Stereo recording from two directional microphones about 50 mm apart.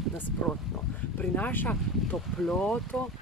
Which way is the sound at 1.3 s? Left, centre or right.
Left.